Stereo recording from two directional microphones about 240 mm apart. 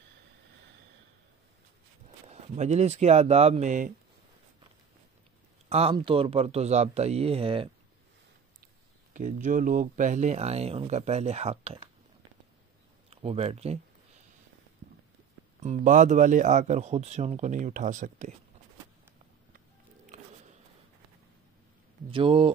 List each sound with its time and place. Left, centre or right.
2.2 s speech: right
5.7 s speech: right
9.1 s speech: right
13.1 s speech: right
15.6 s speech: right
22.1 s speech: right